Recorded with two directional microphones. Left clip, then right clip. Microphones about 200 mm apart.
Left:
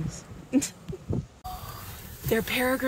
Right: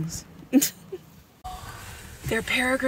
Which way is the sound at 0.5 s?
40° right (ahead or behind).